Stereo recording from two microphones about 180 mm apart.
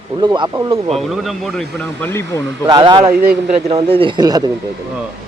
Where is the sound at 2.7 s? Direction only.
25° right (ahead or behind).